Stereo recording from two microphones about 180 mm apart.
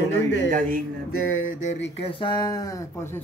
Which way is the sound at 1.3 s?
90° left.